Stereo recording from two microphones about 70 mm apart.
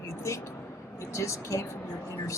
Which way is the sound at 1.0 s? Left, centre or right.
Left.